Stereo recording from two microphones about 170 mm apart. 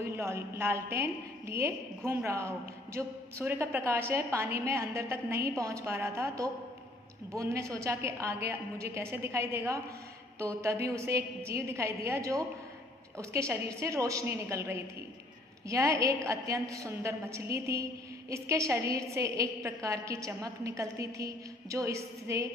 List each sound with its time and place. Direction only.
0.1 s a woman's voice: 15° right (ahead or behind)